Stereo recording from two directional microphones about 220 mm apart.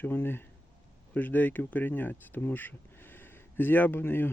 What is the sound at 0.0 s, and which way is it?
Speech, 10° left (ahead or behind).